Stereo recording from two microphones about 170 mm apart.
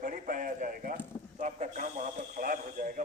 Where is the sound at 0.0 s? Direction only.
50° right (ahead or behind).